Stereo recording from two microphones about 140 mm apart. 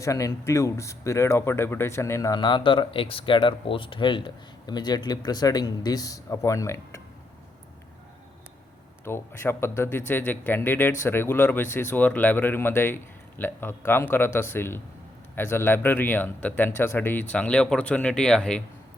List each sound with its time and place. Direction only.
0.0 s speech: 20° left (ahead or behind)
2.4 s speech: 35° left (ahead or behind)
9.0 s speech: 15° left (ahead or behind)